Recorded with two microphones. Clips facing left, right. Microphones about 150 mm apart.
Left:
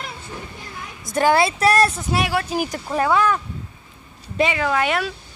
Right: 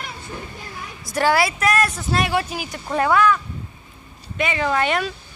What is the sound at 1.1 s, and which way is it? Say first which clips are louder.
Speech: left 2 dB; 25° left (ahead or behind).